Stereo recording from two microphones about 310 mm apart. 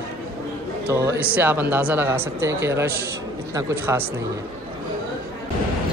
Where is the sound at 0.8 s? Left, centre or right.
Centre.